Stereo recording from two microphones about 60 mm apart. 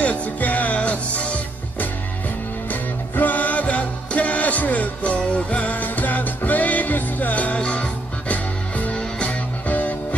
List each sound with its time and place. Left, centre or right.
0.0 s music: left